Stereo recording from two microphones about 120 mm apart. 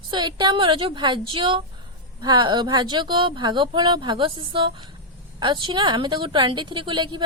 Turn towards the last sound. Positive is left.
turn(degrees=-40)  # may be behind; listen again after turning